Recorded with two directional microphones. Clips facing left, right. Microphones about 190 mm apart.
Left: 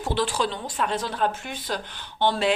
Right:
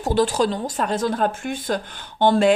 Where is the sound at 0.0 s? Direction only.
40° right (ahead or behind).